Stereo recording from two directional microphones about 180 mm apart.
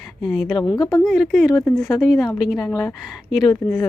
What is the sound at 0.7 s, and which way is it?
Speech, 20° left (ahead or behind).